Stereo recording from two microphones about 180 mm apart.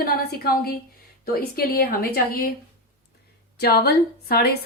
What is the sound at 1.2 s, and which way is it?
A woman's voice, 60° left (ahead or behind).